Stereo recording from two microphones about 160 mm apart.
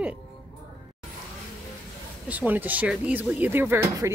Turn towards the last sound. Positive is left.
turn(degrees=-15)  # may be behind; listen again after turning